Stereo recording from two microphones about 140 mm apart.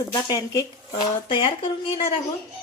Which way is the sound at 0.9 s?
35° left (ahead or behind).